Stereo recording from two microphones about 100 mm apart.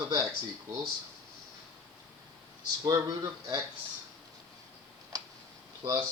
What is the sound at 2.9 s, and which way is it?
Speech, 40° right (ahead or behind).